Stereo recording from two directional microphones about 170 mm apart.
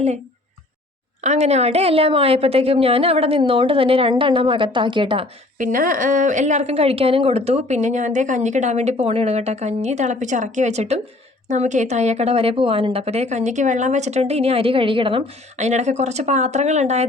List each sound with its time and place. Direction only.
1.2 s speech: 40° right (ahead or behind)
5.5 s a woman's voice: 50° right (ahead or behind)